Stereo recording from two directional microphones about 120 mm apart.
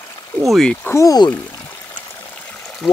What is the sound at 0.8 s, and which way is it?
Speech, 25° left (ahead or behind).